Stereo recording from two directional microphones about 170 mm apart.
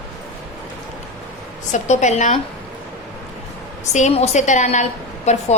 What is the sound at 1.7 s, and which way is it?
Speech, 45° left (ahead or behind).